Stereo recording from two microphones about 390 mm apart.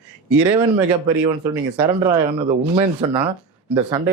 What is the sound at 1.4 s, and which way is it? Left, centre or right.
A man's voice, centre.